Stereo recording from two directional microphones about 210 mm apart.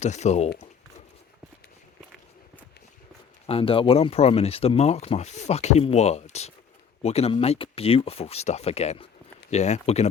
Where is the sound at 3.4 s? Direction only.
25° left (ahead or behind).